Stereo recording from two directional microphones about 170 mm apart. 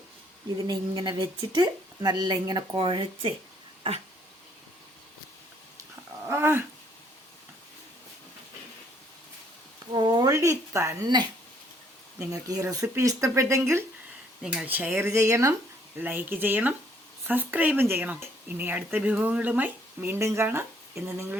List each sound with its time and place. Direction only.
0.7 s a woman's voice: 25° right (ahead or behind)
6.2 s dog: 15° right (ahead or behind)
9.9 s speech: 25° right (ahead or behind)
12.3 s a woman's voice: 20° right (ahead or behind)